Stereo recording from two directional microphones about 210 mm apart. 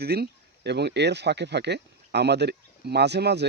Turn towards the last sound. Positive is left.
turn(degrees=-55)  # may be behind; listen again after turning